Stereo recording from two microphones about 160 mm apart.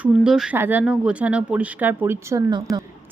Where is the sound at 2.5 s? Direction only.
25° right (ahead or behind).